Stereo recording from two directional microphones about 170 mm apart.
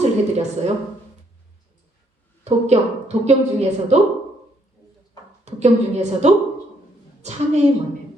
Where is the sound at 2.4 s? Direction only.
40° right (ahead or behind).